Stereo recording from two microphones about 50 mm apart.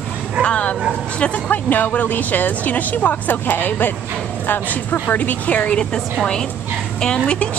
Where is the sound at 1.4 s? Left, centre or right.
Left.